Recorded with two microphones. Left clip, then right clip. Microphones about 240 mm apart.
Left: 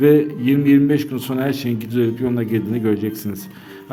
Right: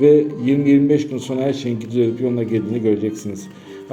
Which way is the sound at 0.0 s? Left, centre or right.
Left.